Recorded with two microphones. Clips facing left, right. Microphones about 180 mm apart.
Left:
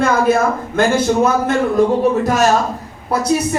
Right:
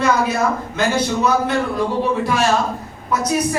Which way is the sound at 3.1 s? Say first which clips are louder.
Left 4 dB; 30° left (ahead or behind).